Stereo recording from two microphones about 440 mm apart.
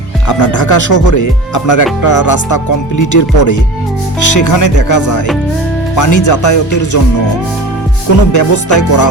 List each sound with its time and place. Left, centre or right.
0.4 s speech: left
8.3 s speech: left